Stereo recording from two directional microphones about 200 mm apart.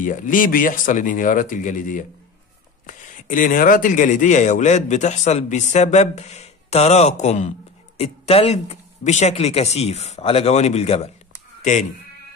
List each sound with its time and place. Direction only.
0.0 s a man's voice: 40° left (ahead or behind)